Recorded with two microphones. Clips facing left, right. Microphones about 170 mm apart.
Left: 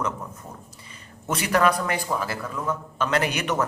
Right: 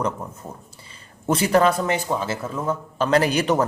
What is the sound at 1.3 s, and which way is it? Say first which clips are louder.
A man's voice: right 4 dB; 30° right (ahead or behind).